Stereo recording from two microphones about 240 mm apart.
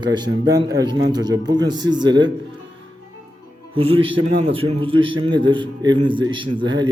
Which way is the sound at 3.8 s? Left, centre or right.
Right.